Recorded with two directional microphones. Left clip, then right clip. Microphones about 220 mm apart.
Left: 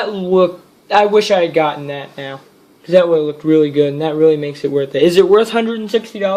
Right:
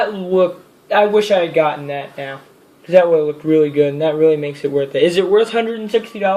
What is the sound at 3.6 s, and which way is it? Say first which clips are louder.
A woman's voice: even; 35° left (ahead or behind).